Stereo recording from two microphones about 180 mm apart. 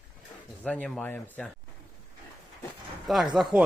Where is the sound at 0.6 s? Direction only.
5° left (ahead or behind).